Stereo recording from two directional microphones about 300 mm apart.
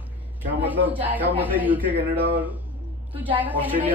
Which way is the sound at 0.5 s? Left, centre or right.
Centre.